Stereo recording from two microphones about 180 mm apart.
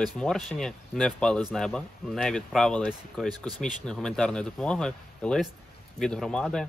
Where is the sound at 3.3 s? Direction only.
25° right (ahead or behind).